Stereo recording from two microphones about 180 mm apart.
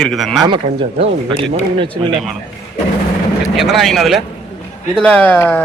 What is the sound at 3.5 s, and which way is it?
A man's voice, centre (ahead or behind).